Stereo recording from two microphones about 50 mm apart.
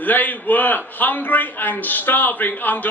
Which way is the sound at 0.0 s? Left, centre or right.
Left.